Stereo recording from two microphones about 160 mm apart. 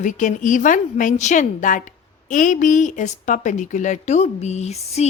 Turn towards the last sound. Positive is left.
turn(degrees=40)  # may be behind; listen again after turning